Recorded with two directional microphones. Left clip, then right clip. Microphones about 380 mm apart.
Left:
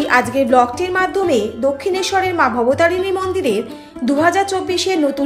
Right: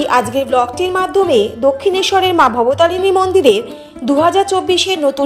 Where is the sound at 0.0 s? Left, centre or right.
Centre.